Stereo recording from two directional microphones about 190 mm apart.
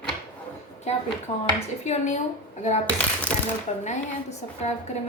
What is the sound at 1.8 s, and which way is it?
Speech, 35° left (ahead or behind).